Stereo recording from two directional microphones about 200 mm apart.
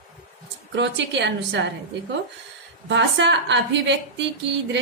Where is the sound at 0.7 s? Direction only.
60° right (ahead or behind).